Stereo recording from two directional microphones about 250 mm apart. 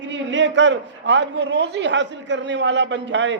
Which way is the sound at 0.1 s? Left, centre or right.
Right.